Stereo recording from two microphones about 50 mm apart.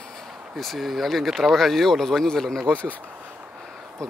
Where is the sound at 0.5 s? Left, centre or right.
Centre.